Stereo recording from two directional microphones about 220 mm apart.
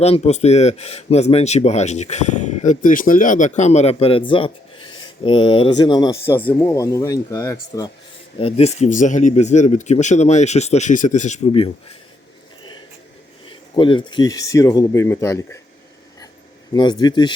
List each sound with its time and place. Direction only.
0.0 s speech: 30° left (ahead or behind); by 7.9 s 10° left (ahead or behind)
8.4 s speech: 25° left (ahead or behind)
13.5 s speech: 20° left (ahead or behind)
16.7 s speech: 20° left (ahead or behind)